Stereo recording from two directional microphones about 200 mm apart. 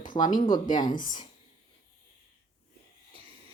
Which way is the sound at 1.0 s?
20° left (ahead or behind).